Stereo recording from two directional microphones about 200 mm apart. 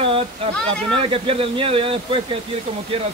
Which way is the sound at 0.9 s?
25° right (ahead or behind).